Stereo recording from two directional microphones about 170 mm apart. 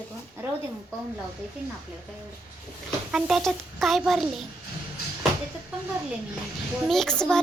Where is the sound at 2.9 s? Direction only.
Centre (ahead or behind).